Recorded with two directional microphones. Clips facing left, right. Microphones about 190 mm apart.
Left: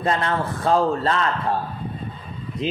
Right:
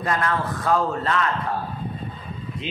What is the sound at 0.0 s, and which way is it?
A man's voice, 25° left (ahead or behind).